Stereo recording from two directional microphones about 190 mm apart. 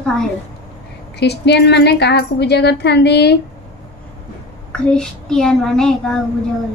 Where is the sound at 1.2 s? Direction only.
60° left (ahead or behind).